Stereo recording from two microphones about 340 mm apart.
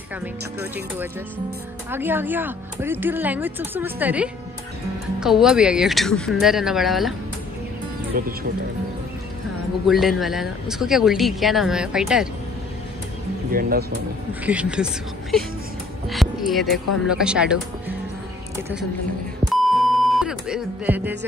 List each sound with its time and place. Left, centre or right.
1.9 s speech: centre
8.2 s speech: right
9.8 s speech: centre
13.5 s speech: right
14.4 s speech: centre
16.1 s music: centre
17.1 s speech: centre
19.5 s music: centre